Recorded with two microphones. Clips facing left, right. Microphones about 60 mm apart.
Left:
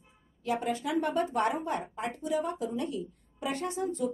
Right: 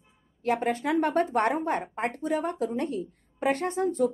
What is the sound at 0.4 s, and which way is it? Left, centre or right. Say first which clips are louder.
A woman's voice: right 5 dB; right.